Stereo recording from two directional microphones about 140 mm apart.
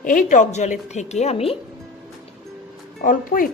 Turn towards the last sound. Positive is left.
turn(degrees=85)